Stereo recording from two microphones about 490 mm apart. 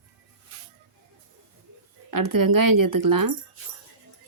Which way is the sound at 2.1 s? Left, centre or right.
Right.